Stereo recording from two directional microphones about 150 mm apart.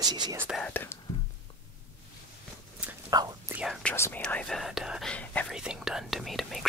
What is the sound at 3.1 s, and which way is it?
Whispering, 25° right (ahead or behind).